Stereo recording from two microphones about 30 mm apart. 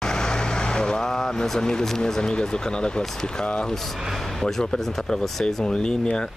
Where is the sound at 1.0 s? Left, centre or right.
Centre.